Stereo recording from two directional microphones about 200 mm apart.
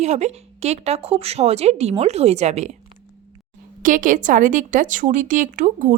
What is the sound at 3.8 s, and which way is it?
Speech, 40° right (ahead or behind).